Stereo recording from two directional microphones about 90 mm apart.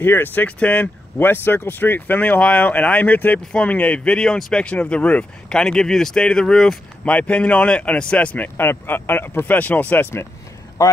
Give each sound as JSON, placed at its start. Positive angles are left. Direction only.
{"t": 0.0, "sound": "speech", "side_deg": 25}
{"t": 7.1, "sound": "speech", "side_deg": 15}